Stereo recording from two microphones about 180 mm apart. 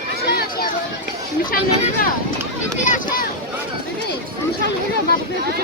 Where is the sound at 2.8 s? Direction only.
45° left (ahead or behind).